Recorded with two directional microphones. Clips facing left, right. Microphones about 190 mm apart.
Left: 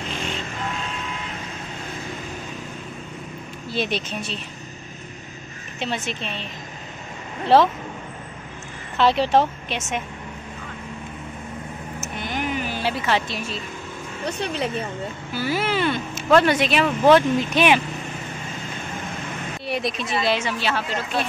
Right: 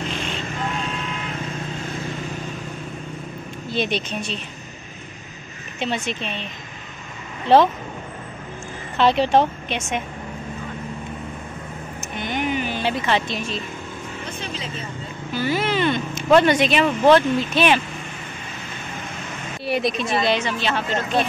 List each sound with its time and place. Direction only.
3.7 s speech: 5° left (ahead or behind)
5.8 s speech: centre (ahead or behind)
7.4 s speech: centre (ahead or behind)
8.9 s speech: centre (ahead or behind)
12.0 s speech: 5° left (ahead or behind)
14.4 s speech: 65° left (ahead or behind)
15.3 s speech: 5° left (ahead or behind)
19.6 s speech: centre (ahead or behind)